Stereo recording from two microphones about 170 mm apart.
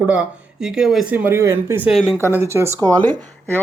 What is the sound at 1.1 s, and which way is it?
Speech, 15° right (ahead or behind).